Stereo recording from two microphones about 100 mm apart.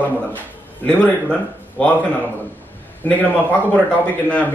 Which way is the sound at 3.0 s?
15° left (ahead or behind).